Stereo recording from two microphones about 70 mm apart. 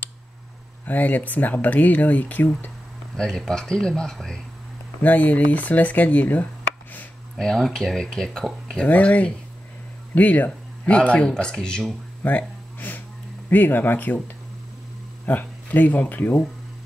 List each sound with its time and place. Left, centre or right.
0.8 s speech: left
3.2 s speech: centre
5.0 s speech: left
7.3 s speech: centre
8.8 s speech: left
12.2 s a sound: left
13.5 s speech: left